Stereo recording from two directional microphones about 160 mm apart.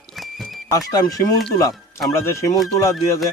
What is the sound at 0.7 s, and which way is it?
Speech, 20° left (ahead or behind).